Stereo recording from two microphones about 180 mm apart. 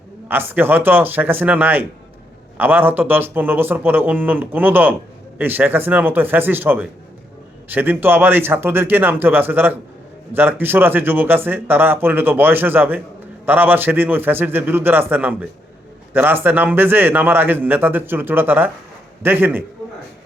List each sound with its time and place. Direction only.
0.3 s speech: 10° right (ahead or behind)